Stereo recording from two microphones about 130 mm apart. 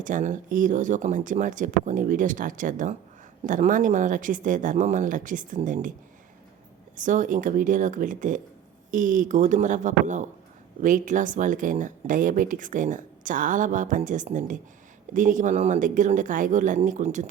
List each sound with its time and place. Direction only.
0.0 s speech: 80° right
6.9 s speech: 80° right
10.8 s speech: 85° right; by 17.2 s 70° right (ahead or behind)